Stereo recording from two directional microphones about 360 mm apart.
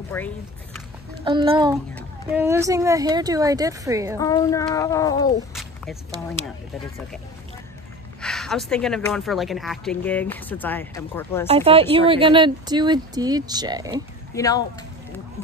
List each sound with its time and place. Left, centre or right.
0.1 s child singing: centre
1.2 s speech: centre
4.2 s child singing: centre
5.5 s a sound: centre
8.2 s speech: centre
11.4 s speech: centre
14.3 s child singing: centre